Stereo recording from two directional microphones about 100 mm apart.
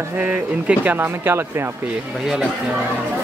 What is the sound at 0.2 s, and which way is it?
Speech, 15° right (ahead or behind).